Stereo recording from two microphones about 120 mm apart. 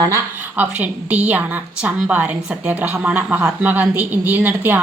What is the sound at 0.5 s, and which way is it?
A woman's voice, 15° right (ahead or behind).